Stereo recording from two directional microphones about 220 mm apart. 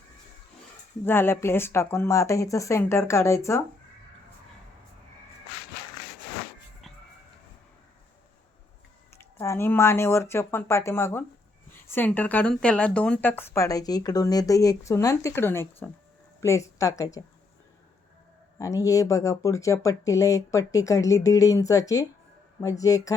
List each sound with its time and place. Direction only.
1.0 s speech: 10° left (ahead or behind)
9.1 s speech: 10° left (ahead or behind)
18.6 s speech: 15° left (ahead or behind)